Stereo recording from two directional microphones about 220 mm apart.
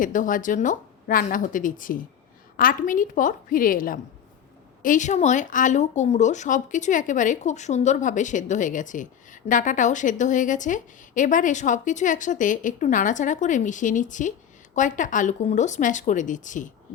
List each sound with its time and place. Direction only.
0.0 s speech: 35° left (ahead or behind)